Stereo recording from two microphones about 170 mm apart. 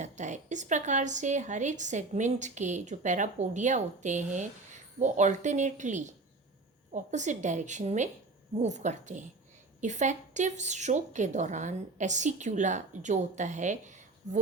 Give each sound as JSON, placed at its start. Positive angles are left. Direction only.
{"t": 0.0, "sound": "speech", "side_deg": -45}